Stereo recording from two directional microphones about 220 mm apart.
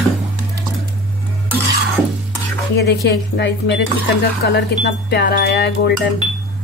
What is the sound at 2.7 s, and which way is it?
Wind chime, 50° left (ahead or behind).